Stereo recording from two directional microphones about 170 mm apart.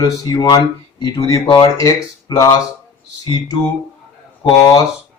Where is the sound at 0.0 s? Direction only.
25° left (ahead or behind).